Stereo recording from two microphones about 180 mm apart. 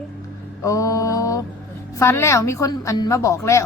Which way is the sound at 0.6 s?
20° left (ahead or behind).